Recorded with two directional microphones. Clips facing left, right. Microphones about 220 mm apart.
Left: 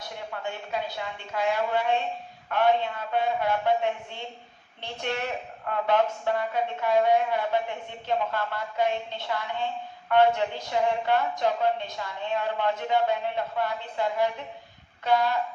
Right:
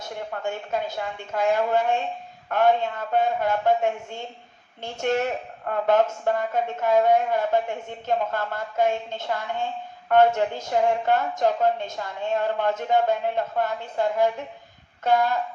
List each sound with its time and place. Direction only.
0.0 s a woman's voice: 45° right (ahead or behind)